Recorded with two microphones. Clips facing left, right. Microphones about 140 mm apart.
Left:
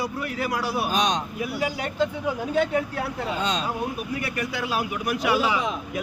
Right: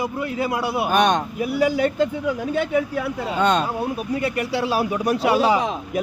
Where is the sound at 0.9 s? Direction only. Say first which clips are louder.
Right 8 dB; 60° right (ahead or behind).